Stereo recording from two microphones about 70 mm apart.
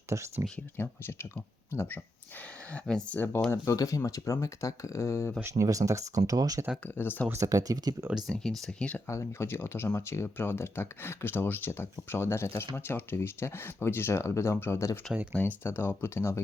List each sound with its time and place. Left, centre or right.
0.1 s speech: right
0.8 s speech: left
3.5 s speech: left
5.4 s speech: right
6.8 s speech: left
7.3 s speech: right
8.3 s speech: centre
9.0 s speech: left
15.1 s speech: centre
15.4 s speech: left